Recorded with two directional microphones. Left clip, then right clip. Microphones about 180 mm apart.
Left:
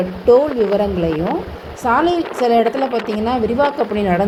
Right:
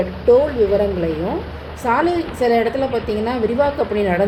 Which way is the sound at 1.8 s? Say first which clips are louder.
Left 2 dB; 25° left (ahead or behind).